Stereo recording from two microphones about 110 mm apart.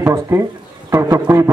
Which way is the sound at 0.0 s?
25° right (ahead or behind).